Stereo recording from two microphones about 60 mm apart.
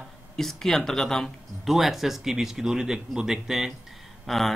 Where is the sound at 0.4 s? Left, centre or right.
Centre.